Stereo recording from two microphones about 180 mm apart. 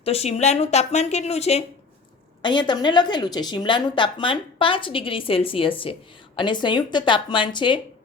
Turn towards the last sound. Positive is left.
turn(degrees=25)  # may be behind; listen again after turning